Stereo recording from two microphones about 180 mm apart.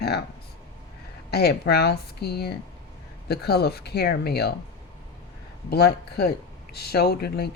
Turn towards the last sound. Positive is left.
turn(degrees=60)  # may be behind; listen again after turning